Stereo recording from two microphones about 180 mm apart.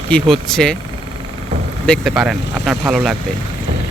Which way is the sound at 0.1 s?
5° left (ahead or behind).